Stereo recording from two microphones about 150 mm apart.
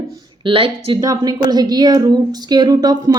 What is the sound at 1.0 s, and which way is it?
A woman's voice, 25° right (ahead or behind).